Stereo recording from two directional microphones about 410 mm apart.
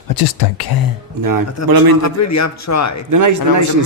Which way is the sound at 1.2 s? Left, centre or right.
Right.